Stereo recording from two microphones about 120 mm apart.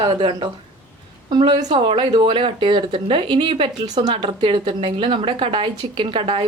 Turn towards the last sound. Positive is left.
turn(degrees=-45)  # may be behind; listen again after turning